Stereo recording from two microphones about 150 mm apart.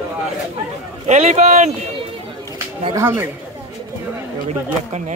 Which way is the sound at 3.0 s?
20° right (ahead or behind).